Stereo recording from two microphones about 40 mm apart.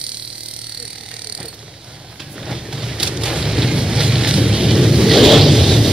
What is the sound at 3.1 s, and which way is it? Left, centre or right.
Vehicle, centre.